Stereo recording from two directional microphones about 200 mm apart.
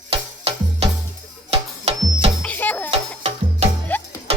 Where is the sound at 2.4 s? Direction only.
10° left (ahead or behind).